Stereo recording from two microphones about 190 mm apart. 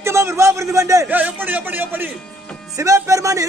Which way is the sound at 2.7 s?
15° right (ahead or behind).